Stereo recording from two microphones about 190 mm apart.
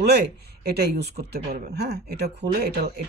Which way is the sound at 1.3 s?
60° right (ahead or behind).